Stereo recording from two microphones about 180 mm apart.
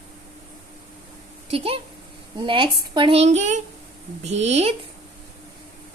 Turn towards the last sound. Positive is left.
turn(degrees=-35)  # may be behind; listen again after turning